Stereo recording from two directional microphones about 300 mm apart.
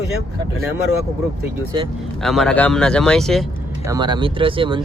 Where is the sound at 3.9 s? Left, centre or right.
Centre.